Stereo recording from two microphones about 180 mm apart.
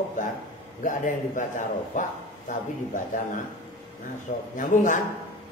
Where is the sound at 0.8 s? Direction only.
45° left (ahead or behind).